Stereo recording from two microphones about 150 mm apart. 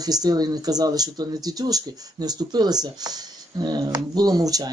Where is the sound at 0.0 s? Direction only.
25° right (ahead or behind).